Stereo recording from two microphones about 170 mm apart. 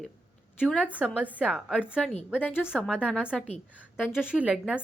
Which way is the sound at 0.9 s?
10° right (ahead or behind).